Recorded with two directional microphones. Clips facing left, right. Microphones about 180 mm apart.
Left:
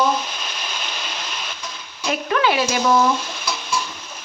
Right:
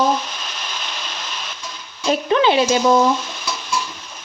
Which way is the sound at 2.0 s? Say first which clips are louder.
Right 4 dB; 25° right (ahead or behind).